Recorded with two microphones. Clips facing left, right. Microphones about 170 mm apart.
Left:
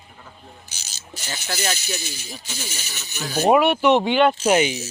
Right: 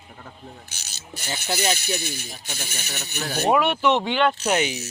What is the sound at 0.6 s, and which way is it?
Speech, 60° right (ahead or behind).